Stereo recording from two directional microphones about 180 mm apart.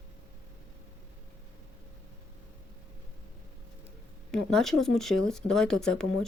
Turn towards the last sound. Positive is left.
turn(degrees=5)  # may be behind; listen again after turning